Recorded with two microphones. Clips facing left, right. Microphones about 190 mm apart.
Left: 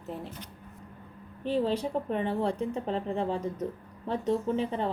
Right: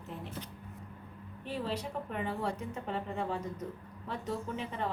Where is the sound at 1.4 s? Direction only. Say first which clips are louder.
Left 9 dB; 30° left (ahead or behind).